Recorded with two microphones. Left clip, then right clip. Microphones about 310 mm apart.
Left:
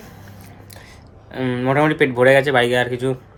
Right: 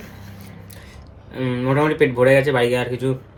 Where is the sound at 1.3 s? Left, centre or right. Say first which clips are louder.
Left 2 dB; centre.